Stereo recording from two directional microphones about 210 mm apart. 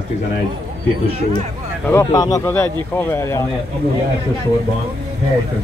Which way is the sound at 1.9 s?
20° left (ahead or behind).